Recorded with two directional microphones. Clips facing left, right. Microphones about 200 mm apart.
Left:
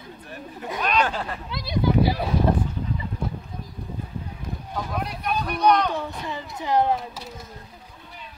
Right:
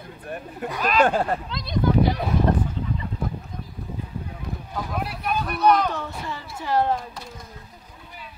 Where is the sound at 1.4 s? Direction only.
10° left (ahead or behind).